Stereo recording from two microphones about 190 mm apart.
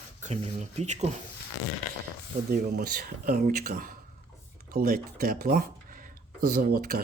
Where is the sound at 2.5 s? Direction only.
50° right (ahead or behind).